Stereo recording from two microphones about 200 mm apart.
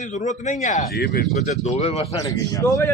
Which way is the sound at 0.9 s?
50° left (ahead or behind).